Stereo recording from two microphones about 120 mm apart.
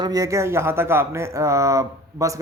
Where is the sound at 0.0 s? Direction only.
30° right (ahead or behind).